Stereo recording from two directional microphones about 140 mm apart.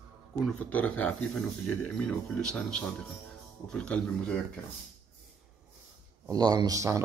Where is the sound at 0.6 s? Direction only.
10° left (ahead or behind).